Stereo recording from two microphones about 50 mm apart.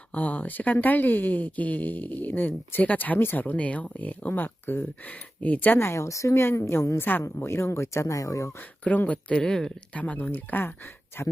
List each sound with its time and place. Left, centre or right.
0.1 s a woman's voice: left
5.4 s a woman's voice: left
5.7 s a woman's voice: left
6.4 s speech: left
8.9 s speech: centre
9.9 s speech: left
10.3 s a woman's voice: left